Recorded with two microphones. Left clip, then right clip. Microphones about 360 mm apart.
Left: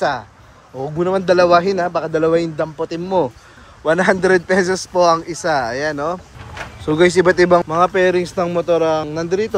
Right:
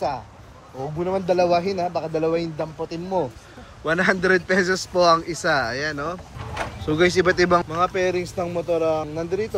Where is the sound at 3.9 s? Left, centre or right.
Centre.